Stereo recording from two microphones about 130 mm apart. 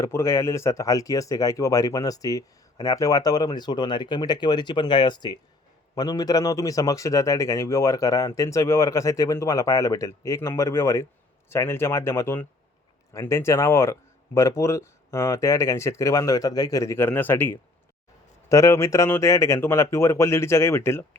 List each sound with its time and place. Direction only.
0.0 s speech: 20° left (ahead or behind)